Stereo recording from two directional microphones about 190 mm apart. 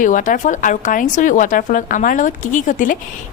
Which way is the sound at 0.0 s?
45° left (ahead or behind).